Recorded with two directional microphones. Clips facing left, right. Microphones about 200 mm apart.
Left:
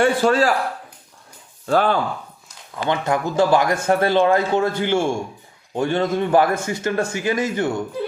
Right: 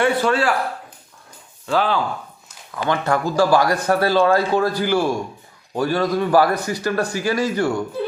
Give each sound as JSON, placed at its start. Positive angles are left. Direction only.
{"t": 0.0, "sound": "speech", "side_deg": 40}
{"t": 1.6, "sound": "speech", "side_deg": 50}
{"t": 2.7, "sound": "a man's voice", "side_deg": 20}